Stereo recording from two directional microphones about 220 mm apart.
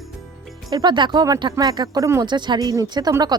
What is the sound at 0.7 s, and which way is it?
Speech, 20° right (ahead or behind).